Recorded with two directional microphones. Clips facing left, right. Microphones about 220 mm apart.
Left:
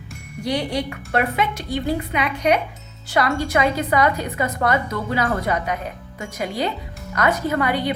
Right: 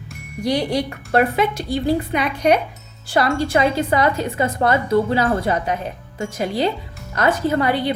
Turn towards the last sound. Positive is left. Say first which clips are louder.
# right 2 dB
turn(degrees=-30)  # may be behind; listen again after turning